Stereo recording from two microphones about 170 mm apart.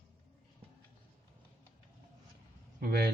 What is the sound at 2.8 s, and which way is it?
Speech, 65° right (ahead or behind).